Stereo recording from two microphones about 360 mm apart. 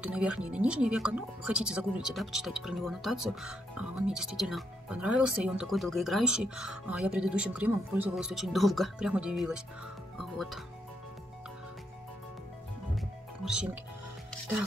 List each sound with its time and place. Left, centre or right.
0.0 s speech: centre
10.1 s music: centre